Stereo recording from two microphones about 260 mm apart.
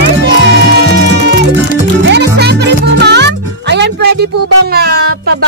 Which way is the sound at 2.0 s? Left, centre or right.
Right.